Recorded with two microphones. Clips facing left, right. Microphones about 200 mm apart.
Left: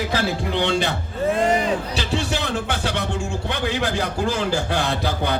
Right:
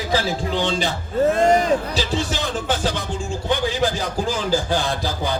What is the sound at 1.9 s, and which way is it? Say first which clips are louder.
A man's voice: right 1 dB; 65° left (ahead or behind).